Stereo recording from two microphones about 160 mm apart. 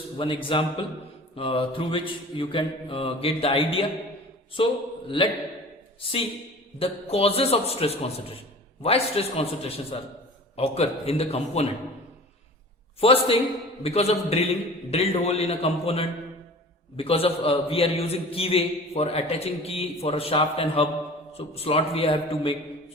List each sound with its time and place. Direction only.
0.2 s a man's voice: 30° left (ahead or behind)
13.0 s a man's voice: 35° left (ahead or behind)